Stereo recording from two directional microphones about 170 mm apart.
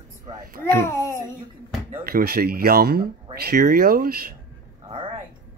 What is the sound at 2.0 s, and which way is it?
Speech, 65° right (ahead or behind).